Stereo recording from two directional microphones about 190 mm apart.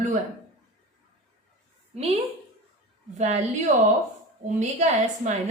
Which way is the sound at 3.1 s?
35° right (ahead or behind).